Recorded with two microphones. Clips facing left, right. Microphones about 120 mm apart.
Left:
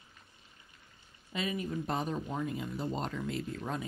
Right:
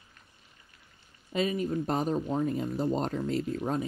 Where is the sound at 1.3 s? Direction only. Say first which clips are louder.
Right 6 dB; 40° right (ahead or behind).